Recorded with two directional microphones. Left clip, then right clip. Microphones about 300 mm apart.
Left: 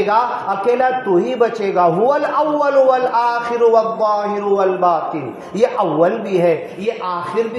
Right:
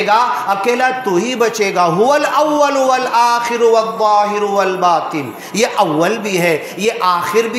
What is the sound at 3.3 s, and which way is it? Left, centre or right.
A man's voice, right.